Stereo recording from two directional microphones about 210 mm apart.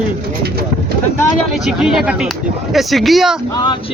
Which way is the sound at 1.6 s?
5° right (ahead or behind).